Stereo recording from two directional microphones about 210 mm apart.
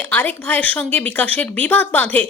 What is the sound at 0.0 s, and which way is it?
Speech, 10° left (ahead or behind).